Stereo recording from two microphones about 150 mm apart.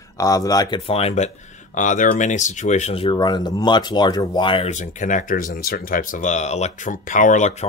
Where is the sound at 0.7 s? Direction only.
40° left (ahead or behind).